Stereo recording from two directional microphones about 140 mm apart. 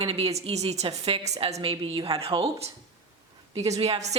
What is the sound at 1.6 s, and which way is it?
A woman's voice, 40° right (ahead or behind).